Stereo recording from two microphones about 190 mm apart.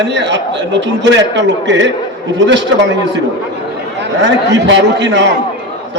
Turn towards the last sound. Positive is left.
turn(degrees=-65)  # may be behind; listen again after turning